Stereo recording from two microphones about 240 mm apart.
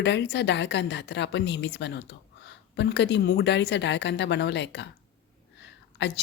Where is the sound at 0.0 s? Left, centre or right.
Left.